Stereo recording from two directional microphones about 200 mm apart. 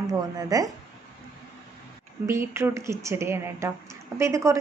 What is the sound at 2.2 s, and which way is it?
A woman's voice, 15° right (ahead or behind).